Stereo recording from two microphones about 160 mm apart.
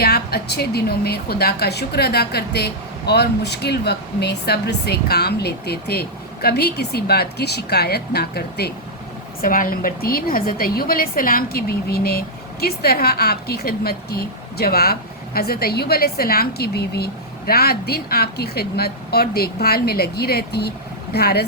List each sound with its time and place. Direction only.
0.0 s a woman's voice: 75° left (ahead or behind)
9.4 s a woman's voice: 60° left (ahead or behind); by 21.4 s 80° left